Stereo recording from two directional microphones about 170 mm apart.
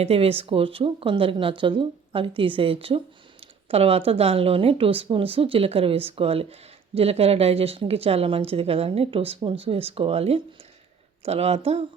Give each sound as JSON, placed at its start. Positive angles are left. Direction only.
{"t": 0.0, "sound": "a woman's voice", "side_deg": -35}